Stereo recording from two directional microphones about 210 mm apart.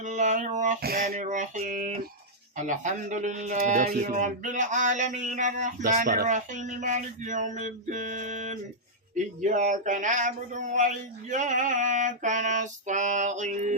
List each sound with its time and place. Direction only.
0.0 s speech: 35° right (ahead or behind)